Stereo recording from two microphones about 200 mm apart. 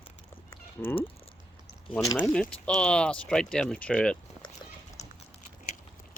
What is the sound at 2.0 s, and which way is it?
Speech, 15° left (ahead or behind).